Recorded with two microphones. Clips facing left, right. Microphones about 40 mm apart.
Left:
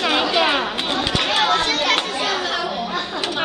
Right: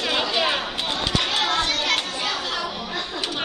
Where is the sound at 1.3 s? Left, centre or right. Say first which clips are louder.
Left 4 dB; left.